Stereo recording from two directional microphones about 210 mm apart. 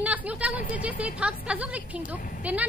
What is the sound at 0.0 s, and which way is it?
Speech, 5° right (ahead or behind).